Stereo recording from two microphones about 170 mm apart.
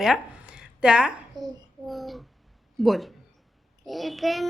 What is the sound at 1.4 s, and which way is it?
Child singing, 25° right (ahead or behind).